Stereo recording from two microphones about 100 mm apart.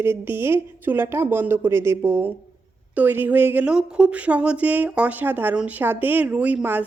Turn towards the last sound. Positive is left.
turn(degrees=-20)  # may be behind; listen again after turning